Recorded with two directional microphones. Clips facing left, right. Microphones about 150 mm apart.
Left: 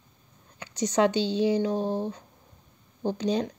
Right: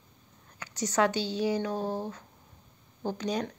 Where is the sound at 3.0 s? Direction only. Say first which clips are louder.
Left 5 dB; 25° left (ahead or behind).